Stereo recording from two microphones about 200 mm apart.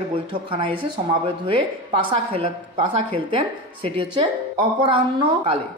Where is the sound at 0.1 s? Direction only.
25° right (ahead or behind).